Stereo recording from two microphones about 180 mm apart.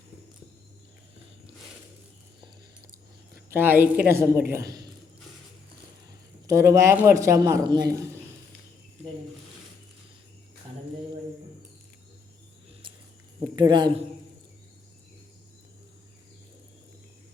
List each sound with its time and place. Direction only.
3.5 s a man's voice: 10° right (ahead or behind)
6.5 s a man's voice: 15° right (ahead or behind)
13.6 s a man's voice: 25° right (ahead or behind)